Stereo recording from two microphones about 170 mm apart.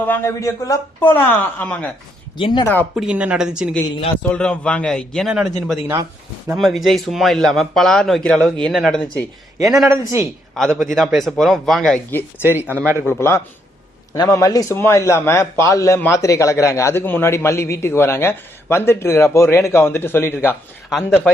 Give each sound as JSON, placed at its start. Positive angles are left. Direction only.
{"t": 0.0, "sound": "a man's voice", "side_deg": 15}
{"t": 2.4, "sound": "speech", "side_deg": 25}
{"t": 2.9, "sound": "a man's voice", "side_deg": -5}
{"t": 9.9, "sound": "speech", "side_deg": -15}
{"t": 10.5, "sound": "a man's voice", "side_deg": 5}
{"t": 12.4, "sound": "speech", "side_deg": -10}
{"t": 13.1, "sound": "a man's voice", "side_deg": 15}